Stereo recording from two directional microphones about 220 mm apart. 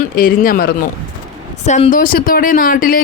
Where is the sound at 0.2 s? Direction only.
40° left (ahead or behind).